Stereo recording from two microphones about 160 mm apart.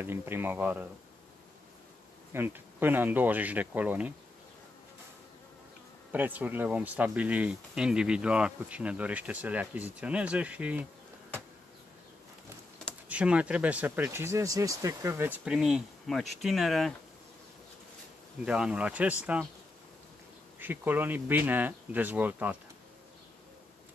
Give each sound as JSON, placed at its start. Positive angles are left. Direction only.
{"t": 0.0, "sound": "speech", "side_deg": -15}
{"t": 2.3, "sound": "speech", "side_deg": -15}
{"t": 6.1, "sound": "speech", "side_deg": -10}
{"t": 13.1, "sound": "speech", "side_deg": -10}
{"t": 18.4, "sound": "speech", "side_deg": -5}
{"t": 20.5, "sound": "speech", "side_deg": -10}